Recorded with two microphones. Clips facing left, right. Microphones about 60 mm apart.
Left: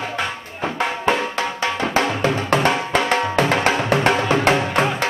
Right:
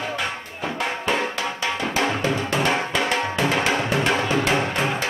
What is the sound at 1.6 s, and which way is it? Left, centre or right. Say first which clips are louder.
Music: left 3 dB; left.